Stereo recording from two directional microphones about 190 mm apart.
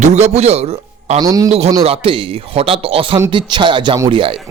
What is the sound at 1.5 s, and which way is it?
A man's voice, 35° right (ahead or behind).